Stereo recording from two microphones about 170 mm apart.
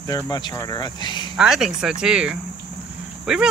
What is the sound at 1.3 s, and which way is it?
Speech, 5° right (ahead or behind).